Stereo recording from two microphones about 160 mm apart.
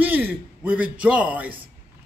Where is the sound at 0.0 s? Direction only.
10° right (ahead or behind).